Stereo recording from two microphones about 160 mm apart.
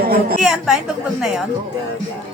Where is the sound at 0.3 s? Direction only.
5° right (ahead or behind).